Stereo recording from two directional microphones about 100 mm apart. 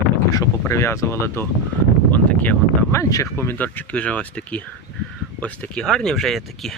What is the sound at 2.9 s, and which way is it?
Speech, 30° left (ahead or behind).